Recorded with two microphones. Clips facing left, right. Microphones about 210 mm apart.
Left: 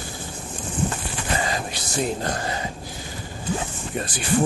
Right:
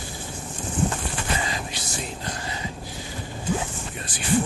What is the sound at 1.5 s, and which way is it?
Speech, 50° left (ahead or behind).